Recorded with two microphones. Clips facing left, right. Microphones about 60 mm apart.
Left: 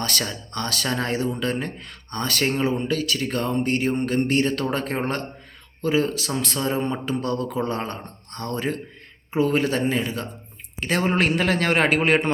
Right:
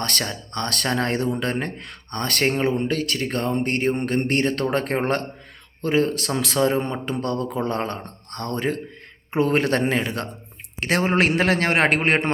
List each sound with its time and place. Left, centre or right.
0.0 s speech: right
5.8 s speech: right
6.4 s speech: right